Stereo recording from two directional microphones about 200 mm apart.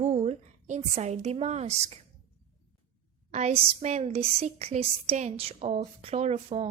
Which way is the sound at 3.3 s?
35° right (ahead or behind).